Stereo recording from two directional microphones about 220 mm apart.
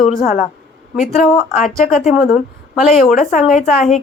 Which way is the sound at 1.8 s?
35° left (ahead or behind).